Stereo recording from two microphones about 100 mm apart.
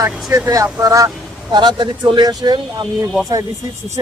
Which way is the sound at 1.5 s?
50° right (ahead or behind).